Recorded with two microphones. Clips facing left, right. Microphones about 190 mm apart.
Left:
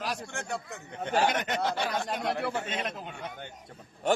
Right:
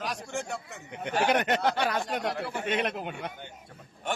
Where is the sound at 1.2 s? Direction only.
65° right (ahead or behind).